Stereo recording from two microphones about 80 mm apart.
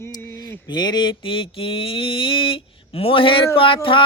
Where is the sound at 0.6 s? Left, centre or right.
Left.